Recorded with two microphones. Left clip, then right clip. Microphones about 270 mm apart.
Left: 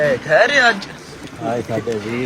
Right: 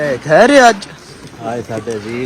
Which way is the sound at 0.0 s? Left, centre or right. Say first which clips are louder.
Right 4 dB; right.